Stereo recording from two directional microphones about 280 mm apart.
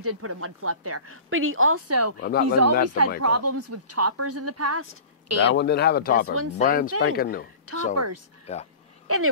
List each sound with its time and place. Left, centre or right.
0.0 s a woman's voice: right
2.1 s speech: left
2.4 s speech: right
2.7 s speech: left
3.2 s speech: right
5.5 s speech: left
7.9 s speech: right
9.0 s speech: right